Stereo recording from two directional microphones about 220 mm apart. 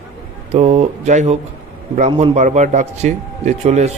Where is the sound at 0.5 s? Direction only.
30° right (ahead or behind).